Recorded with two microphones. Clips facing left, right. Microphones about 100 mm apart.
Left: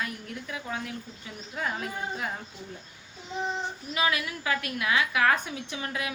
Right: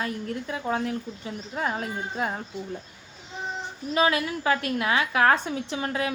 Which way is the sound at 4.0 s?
30° right (ahead or behind).